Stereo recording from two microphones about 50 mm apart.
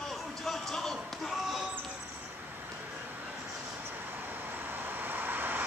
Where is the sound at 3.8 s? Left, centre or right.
Right.